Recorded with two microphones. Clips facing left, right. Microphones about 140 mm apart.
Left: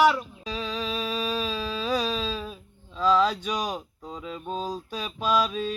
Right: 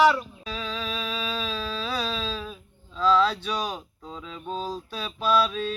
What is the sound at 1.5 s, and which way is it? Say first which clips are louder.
Speech: left 3 dB; 15° left (ahead or behind).